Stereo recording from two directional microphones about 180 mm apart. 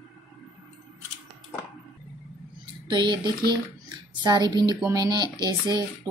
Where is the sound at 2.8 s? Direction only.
25° right (ahead or behind).